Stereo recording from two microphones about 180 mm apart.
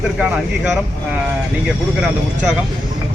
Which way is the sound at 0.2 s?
5° right (ahead or behind).